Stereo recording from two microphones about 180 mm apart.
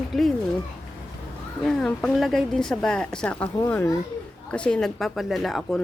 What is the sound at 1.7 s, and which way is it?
A woman's voice, 5° left (ahead or behind).